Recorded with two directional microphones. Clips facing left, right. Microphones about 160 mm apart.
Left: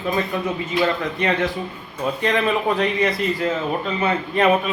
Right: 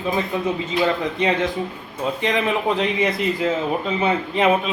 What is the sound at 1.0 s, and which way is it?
A man's voice, 15° right (ahead or behind).